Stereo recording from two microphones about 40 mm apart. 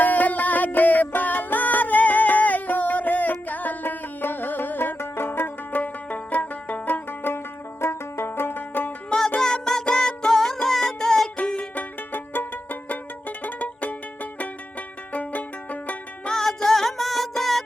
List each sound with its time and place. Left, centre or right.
0.0 s music: left
4.9 s music: left
5.7 s music: left
9.4 s music: centre
11.3 s music: left
11.7 s music: left
16.2 s music: centre